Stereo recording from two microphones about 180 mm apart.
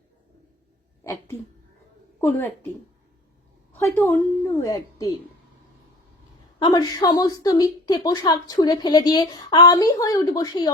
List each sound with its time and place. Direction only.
1.0 s a woman's voice: 15° left (ahead or behind)
3.7 s a woman's voice: 10° left (ahead or behind)
6.6 s a woman's voice: 25° left (ahead or behind)